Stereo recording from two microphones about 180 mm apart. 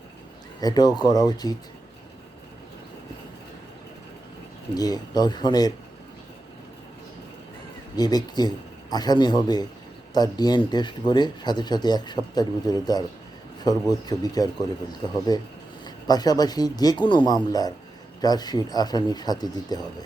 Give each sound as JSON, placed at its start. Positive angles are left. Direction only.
{"t": 0.6, "sound": "speech", "side_deg": 20}
{"t": 4.7, "sound": "speech", "side_deg": 20}
{"t": 7.9, "sound": "speech", "side_deg": 20}